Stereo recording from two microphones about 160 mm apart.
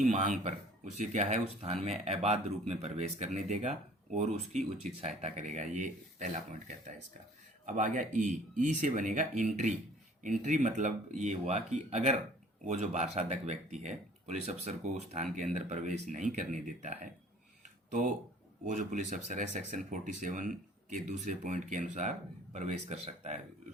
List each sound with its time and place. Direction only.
0.0 s speech: 50° right (ahead or behind)
18.6 s speech: 50° right (ahead or behind)